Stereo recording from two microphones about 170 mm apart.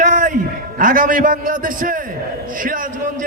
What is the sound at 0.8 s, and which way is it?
A man's voice, 55° right (ahead or behind).